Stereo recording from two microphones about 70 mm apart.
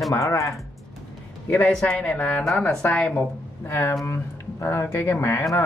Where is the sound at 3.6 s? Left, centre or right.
Left.